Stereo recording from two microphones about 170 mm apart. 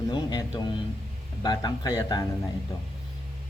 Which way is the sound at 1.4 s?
25° left (ahead or behind).